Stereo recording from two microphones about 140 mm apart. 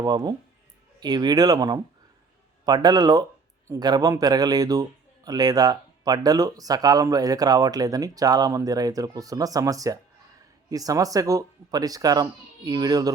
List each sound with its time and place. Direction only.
0.0 s a man's voice: 30° right (ahead or behind)